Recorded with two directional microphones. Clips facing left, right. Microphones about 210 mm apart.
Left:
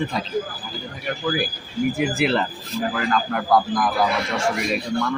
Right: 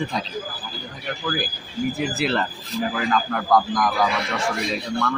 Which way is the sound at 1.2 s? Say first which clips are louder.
Left 3 dB; 10° left (ahead or behind).